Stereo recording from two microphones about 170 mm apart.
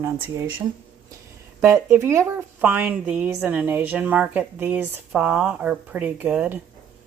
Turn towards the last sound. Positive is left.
turn(degrees=-10)  # may be behind; listen again after turning